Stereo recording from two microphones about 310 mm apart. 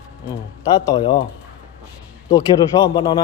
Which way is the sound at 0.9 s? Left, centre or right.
Centre.